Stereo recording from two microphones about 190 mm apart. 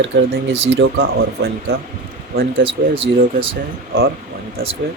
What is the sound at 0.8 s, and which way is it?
Speech, 65° right (ahead or behind).